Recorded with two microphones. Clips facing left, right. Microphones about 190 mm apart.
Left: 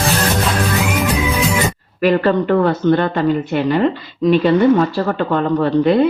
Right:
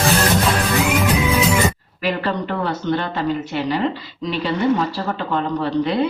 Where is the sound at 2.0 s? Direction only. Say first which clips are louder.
Left 9 dB; 50° left (ahead or behind).